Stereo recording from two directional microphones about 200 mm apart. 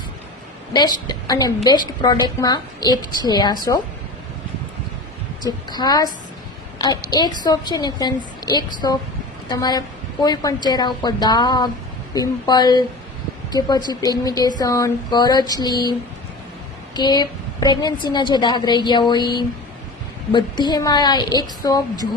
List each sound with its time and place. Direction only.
0.7 s a woman's voice: 20° left (ahead or behind)
5.4 s a woman's voice: 20° left (ahead or behind)